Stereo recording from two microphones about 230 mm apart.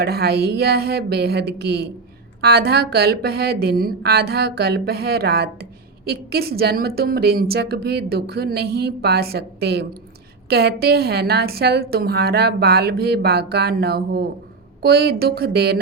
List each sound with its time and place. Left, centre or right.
0.0 s a woman's voice: right